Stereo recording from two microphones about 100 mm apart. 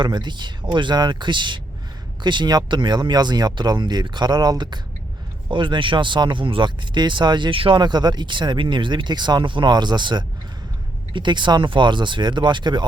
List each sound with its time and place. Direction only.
0.0 s speech: 50° right (ahead or behind)